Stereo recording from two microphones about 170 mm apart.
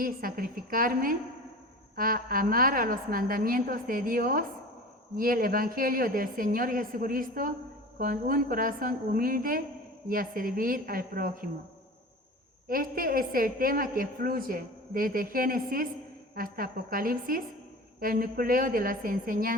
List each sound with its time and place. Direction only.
0.0 s a woman's voice: 60° right (ahead or behind)
12.6 s a woman's voice: 60° right (ahead or behind)